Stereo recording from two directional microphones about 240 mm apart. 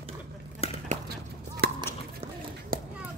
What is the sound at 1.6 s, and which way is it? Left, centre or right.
Run, right.